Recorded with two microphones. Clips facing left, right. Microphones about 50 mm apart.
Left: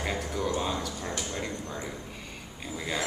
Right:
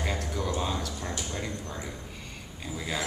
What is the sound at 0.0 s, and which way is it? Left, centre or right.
Music, centre.